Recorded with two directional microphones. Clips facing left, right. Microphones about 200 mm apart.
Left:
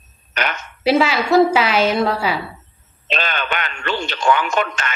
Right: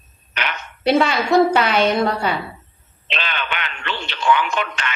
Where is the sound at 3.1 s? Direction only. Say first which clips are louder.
Left 4 dB; 45° left (ahead or behind).